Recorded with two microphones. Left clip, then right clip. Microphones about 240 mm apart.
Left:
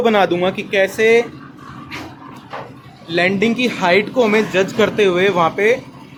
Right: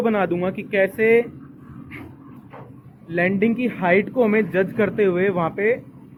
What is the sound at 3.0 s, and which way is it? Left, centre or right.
A man's voice, centre.